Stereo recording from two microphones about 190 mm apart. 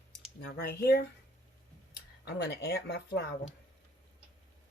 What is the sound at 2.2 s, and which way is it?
Speech, 60° left (ahead or behind).